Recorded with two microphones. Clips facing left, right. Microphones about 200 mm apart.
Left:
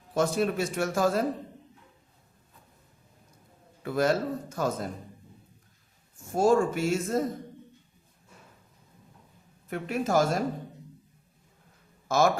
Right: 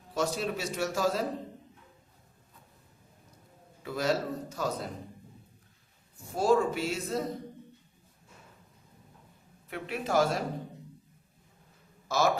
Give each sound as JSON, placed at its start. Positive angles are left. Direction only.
{"t": 0.1, "sound": "a man's voice", "side_deg": 50}
{"t": 3.8, "sound": "a man's voice", "side_deg": 50}
{"t": 6.3, "sound": "a man's voice", "side_deg": 50}
{"t": 9.6, "sound": "a man's voice", "side_deg": 45}
{"t": 12.0, "sound": "a man's voice", "side_deg": 50}